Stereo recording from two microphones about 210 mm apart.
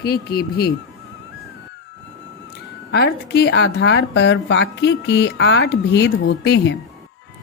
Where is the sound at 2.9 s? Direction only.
50° left (ahead or behind).